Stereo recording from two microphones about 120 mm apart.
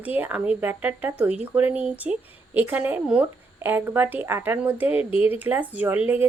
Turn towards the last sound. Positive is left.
turn(degrees=-15)  # may be behind; listen again after turning